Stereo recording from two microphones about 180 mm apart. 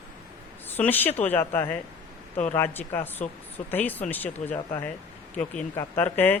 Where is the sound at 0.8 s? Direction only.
10° left (ahead or behind).